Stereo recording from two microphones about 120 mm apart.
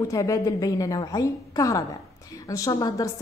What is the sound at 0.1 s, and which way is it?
A woman's voice, 30° left (ahead or behind).